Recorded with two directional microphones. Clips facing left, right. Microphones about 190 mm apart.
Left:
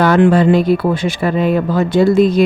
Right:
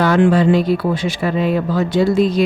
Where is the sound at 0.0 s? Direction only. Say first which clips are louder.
Left 3 dB; 55° left (ahead or behind).